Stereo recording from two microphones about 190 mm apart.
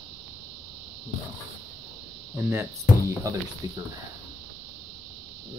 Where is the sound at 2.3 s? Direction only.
10° right (ahead or behind).